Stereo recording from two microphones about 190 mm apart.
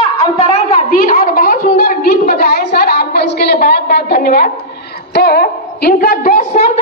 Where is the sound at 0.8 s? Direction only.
45° left (ahead or behind).